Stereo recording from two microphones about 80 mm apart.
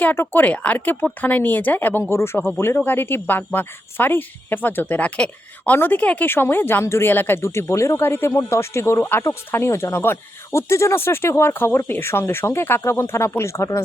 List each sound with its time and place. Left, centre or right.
0.0 s speech: left
7.4 s speech: left